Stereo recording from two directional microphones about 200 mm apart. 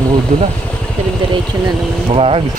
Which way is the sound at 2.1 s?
30° right (ahead or behind).